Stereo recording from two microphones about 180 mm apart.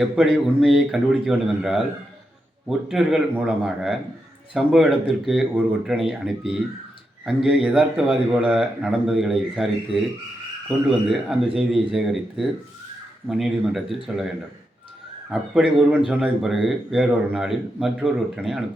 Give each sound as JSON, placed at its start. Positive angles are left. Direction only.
{"t": 0.0, "sound": "speech", "side_deg": -5}
{"t": 10.7, "sound": "speech", "side_deg": 0}